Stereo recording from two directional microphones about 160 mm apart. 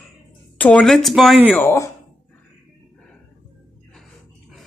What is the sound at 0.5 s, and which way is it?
Speech, 10° left (ahead or behind).